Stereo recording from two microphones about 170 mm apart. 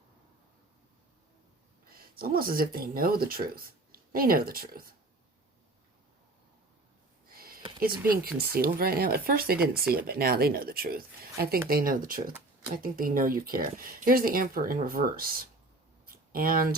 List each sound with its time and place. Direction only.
2.0 s speech: 60° right (ahead or behind)
7.3 s a sound: 60° right (ahead or behind)
8.1 s speech: 60° right (ahead or behind)
9.6 s speech: 5° right (ahead or behind)
9.9 s speech: 60° right (ahead or behind)